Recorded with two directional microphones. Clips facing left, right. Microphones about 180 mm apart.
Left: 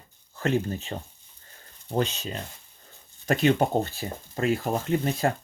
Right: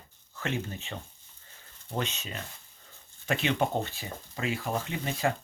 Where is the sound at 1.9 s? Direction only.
35° left (ahead or behind).